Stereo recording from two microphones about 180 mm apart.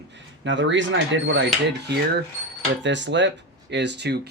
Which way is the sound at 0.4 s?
90° right.